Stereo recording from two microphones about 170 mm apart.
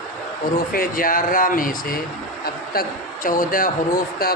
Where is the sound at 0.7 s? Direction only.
55° left (ahead or behind).